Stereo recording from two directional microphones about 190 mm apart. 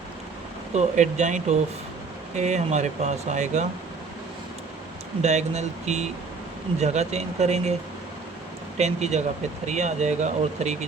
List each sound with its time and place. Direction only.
0.7 s speech: 40° right (ahead or behind)
5.2 s speech: 35° right (ahead or behind)
8.8 s speech: 35° right (ahead or behind)